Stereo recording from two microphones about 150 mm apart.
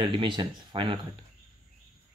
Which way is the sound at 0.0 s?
30° right (ahead or behind).